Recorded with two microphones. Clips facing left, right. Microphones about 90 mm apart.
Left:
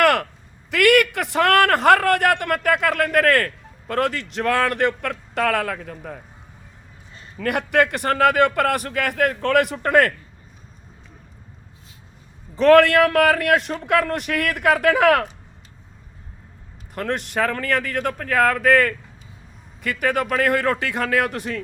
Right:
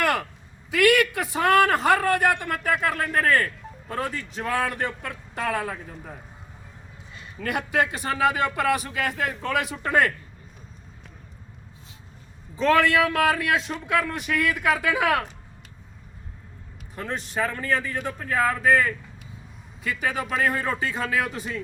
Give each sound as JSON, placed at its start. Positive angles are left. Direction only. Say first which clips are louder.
{"t": 0.0, "sound": "a sound", "louder": "left 7 dB", "side_deg": 65}
{"t": 0.7, "sound": "a man's voice", "louder": "left 3 dB", "side_deg": 65}
{"t": 7.3, "sound": "a man's voice", "louder": "left 5 dB", "side_deg": 60}
{"t": 12.5, "sound": "a man's voice", "louder": "left 7 dB", "side_deg": 65}
{"t": 16.9, "sound": "a man's voice", "louder": "left 6 dB", "side_deg": 70}